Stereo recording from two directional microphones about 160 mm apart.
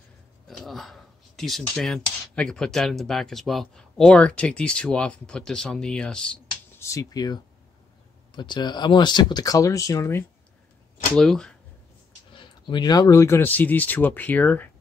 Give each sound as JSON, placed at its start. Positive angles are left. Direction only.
{"t": 0.5, "sound": "speech", "side_deg": 0}
{"t": 6.8, "sound": "speech", "side_deg": 20}
{"t": 8.4, "sound": "speech", "side_deg": 30}
{"t": 11.1, "sound": "speech", "side_deg": 5}
{"t": 12.3, "sound": "speech", "side_deg": 30}